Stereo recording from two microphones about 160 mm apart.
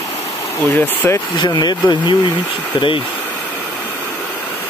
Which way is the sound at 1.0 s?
15° left (ahead or behind).